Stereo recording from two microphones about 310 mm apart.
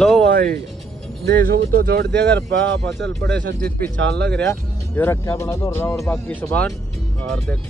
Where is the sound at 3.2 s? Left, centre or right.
Centre.